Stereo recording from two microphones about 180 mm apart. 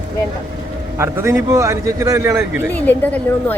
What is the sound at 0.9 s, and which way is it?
A man's voice, 15° right (ahead or behind).